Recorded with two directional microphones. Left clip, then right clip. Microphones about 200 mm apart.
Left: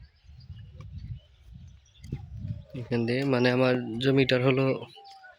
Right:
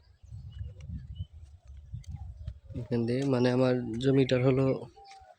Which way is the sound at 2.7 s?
Centre (ahead or behind).